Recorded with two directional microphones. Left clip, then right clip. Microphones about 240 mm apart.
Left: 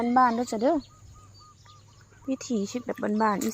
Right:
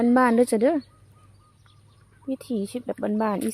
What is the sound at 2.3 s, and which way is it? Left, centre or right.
Speech, centre.